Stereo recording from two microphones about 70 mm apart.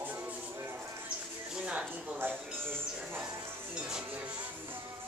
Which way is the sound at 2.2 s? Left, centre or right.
Right.